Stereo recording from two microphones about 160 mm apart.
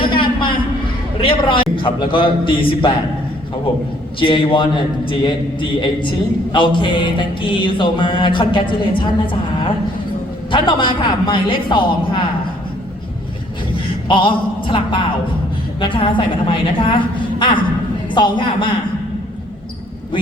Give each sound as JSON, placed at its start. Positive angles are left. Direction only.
{"t": 0.0, "sound": "a sound", "side_deg": 30}
{"t": 1.2, "sound": "a man's voice", "side_deg": 30}
{"t": 4.2, "sound": "a man's voice", "side_deg": 35}
{"t": 10.5, "sound": "a man's voice", "side_deg": 30}
{"t": 13.7, "sound": "a man's voice", "side_deg": 30}